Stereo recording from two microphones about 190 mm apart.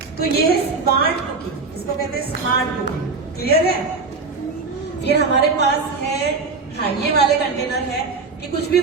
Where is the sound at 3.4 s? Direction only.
55° left (ahead or behind).